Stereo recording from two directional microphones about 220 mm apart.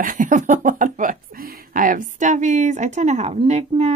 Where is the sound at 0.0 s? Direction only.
35° right (ahead or behind).